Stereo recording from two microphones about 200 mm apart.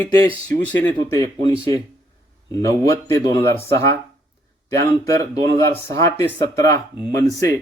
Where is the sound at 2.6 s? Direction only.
15° left (ahead or behind).